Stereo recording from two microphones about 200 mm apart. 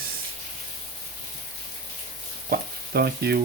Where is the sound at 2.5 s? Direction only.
50° right (ahead or behind).